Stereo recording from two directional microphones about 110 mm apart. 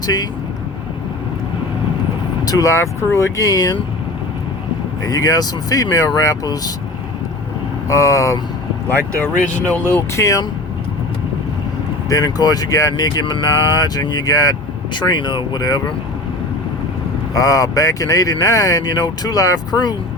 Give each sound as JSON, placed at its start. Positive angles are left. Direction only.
{"t": 0.0, "sound": "speech", "side_deg": 35}
{"t": 2.4, "sound": "speech", "side_deg": 35}
{"t": 5.0, "sound": "speech", "side_deg": 35}
{"t": 7.9, "sound": "speech", "side_deg": 30}
{"t": 8.9, "sound": "speech", "side_deg": 15}
{"t": 10.2, "sound": "speech", "side_deg": 30}
{"t": 12.0, "sound": "speech", "side_deg": 35}
{"t": 17.3, "sound": "speech", "side_deg": 30}